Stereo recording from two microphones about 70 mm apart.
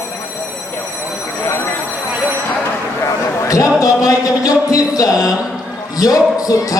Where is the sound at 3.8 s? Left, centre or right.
Left.